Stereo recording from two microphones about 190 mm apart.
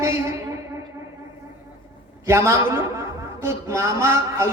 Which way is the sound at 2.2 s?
15° right (ahead or behind).